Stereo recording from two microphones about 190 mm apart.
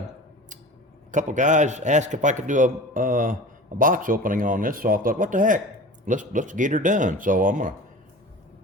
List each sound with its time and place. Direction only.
1.1 s a man's voice: 40° right (ahead or behind)